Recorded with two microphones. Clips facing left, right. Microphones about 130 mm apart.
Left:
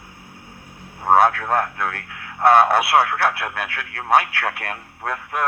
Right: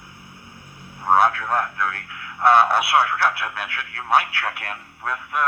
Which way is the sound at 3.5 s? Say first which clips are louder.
Left 2 dB; 55° left (ahead or behind).